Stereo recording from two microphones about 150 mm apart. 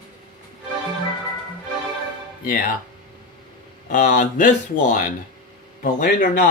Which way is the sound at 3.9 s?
60° left (ahead or behind).